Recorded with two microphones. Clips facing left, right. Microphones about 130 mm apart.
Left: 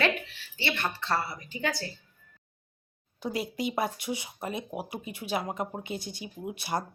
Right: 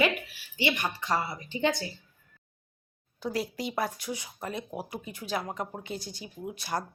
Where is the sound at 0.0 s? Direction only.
10° right (ahead or behind).